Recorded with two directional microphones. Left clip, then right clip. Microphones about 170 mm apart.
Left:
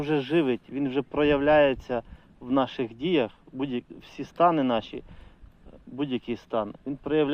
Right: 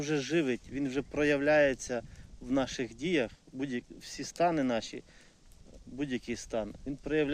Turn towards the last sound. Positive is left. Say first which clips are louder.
# left 6 dB
turn(degrees=-20)  # may be behind; listen again after turning